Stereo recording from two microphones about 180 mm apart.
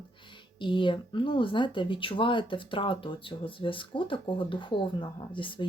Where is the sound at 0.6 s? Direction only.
25° left (ahead or behind).